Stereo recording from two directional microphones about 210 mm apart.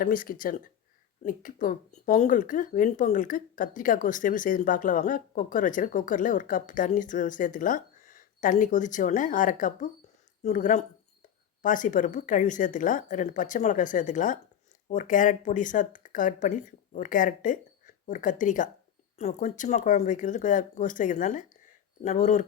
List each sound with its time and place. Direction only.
0.0 s speech: 40° left (ahead or behind)